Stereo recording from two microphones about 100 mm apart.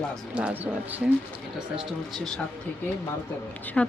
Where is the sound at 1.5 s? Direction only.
5° right (ahead or behind).